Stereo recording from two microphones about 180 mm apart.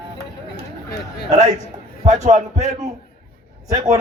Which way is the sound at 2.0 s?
40° right (ahead or behind).